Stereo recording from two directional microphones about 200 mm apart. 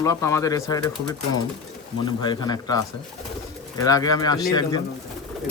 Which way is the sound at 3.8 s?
20° left (ahead or behind).